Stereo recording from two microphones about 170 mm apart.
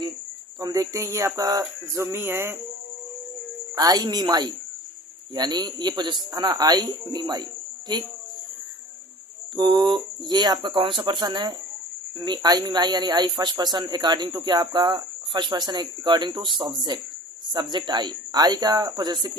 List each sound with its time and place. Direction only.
0.6 s a sound: 20° right (ahead or behind)
3.8 s speech: 20° right (ahead or behind)
9.6 s speech: 25° right (ahead or behind)